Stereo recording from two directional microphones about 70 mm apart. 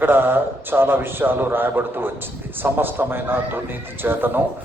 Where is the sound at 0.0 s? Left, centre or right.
Right.